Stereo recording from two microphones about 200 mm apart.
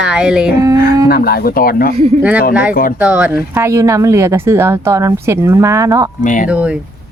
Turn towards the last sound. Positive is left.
turn(degrees=-5)  # may be behind; listen again after turning